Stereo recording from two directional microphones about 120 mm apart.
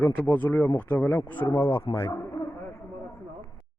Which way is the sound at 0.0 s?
15° left (ahead or behind).